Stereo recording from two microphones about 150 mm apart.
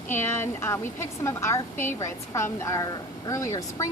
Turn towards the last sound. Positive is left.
turn(degrees=20)  # may be behind; listen again after turning